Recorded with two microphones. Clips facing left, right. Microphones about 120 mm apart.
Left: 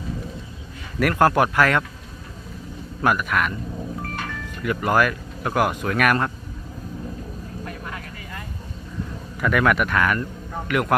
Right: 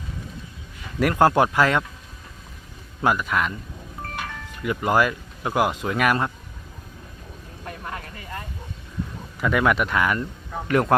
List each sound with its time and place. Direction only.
0.9 s speech: 20° right (ahead or behind)
3.0 s speech: 20° right (ahead or behind)
9.4 s speech: 20° right (ahead or behind)
10.7 s a man's voice: 30° right (ahead or behind)